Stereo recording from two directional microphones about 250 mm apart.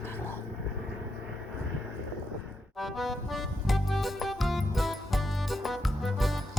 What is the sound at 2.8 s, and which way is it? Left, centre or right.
Music, centre.